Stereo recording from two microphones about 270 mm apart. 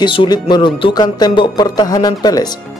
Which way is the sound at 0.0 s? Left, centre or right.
Centre.